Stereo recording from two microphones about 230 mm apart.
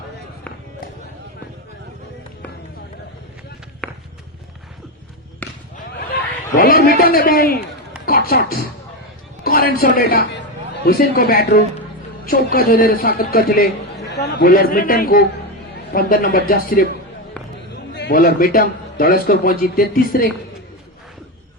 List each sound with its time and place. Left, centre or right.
3.8 s walk: centre
5.4 s basketball bounce: centre
6.5 s a man's voice: left
17.9 s a man's voice: left